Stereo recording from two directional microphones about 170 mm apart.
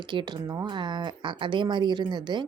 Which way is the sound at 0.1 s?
25° right (ahead or behind).